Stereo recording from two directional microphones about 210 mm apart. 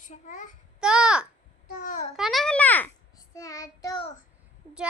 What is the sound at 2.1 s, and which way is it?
Speech, centre (ahead or behind).